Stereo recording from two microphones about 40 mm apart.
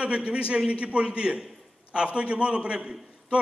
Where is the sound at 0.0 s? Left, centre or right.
Right.